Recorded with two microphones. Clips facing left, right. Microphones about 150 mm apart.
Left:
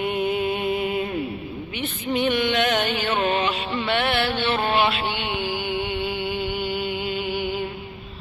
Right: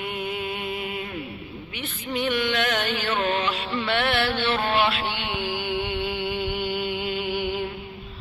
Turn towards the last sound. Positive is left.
turn(degrees=45)  # may be behind; listen again after turning